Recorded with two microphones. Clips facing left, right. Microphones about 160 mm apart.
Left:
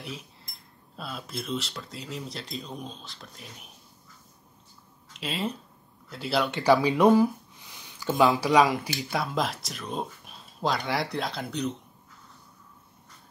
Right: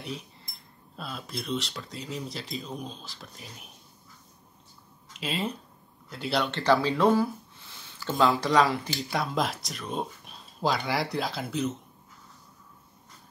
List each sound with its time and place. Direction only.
0.0 s dishes: centre (ahead or behind)
0.9 s speech: centre (ahead or behind)
5.1 s speech: centre (ahead or behind)
6.5 s speech: 15° left (ahead or behind)
8.9 s speech: centre (ahead or behind)